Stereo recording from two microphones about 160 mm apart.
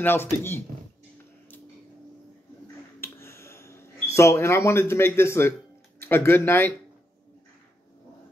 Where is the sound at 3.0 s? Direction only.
15° left (ahead or behind).